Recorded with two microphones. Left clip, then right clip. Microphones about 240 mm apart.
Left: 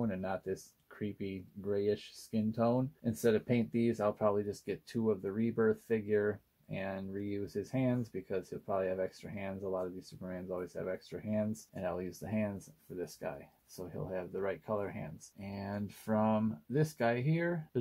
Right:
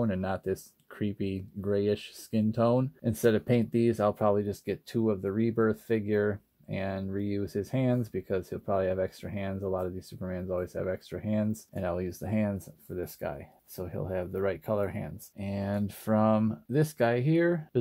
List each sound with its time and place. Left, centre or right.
0.0 s speech: right